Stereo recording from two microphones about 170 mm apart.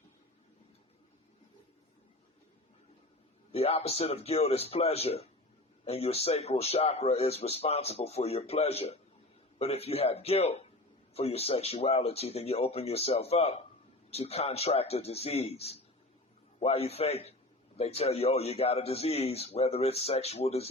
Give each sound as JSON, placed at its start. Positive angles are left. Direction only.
{"t": 3.5, "sound": "a man's voice", "side_deg": 35}